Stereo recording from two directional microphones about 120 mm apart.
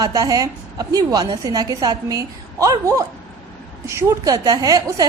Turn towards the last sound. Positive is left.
turn(degrees=-30)  # may be behind; listen again after turning